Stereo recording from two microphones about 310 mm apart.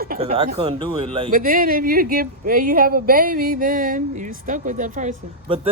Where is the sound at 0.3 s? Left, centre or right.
Centre.